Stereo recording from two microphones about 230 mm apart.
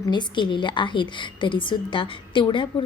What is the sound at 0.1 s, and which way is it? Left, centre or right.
A woman's voice, centre.